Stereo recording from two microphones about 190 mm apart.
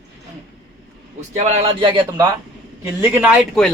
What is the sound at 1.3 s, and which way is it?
Speech, 35° right (ahead or behind).